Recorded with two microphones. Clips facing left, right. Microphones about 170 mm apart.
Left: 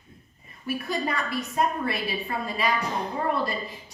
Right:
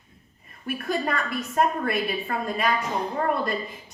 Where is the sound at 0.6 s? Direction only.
50° right (ahead or behind).